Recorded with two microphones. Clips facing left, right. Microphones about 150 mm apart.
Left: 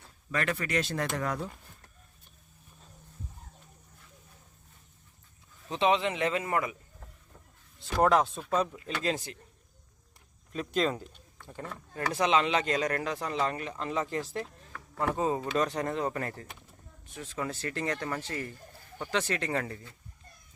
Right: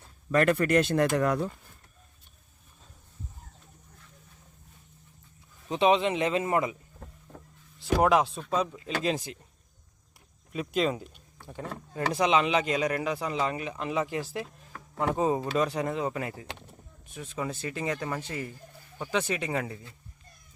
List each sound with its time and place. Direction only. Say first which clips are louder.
0.3 s speech: right 8 dB; 50° right (ahead or behind)
5.6 s speech: right 3 dB; 20° right (ahead or behind)
8.0 s speech: even; 5° right (ahead or behind)
8.4 s speech: even; 5° left (ahead or behind)
9.0 s speech: right 2 dB; 15° right (ahead or behind)
10.5 s speech: right 2 dB; 10° right (ahead or behind)
11.6 s speech: right 3 dB; 25° right (ahead or behind)
14.7 s a sound: right 2 dB; 20° right (ahead or behind)
15.5 s speech: right 2 dB; 10° right (ahead or behind)